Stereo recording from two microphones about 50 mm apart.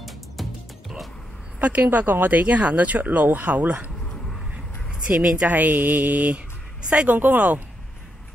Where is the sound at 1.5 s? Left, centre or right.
Right.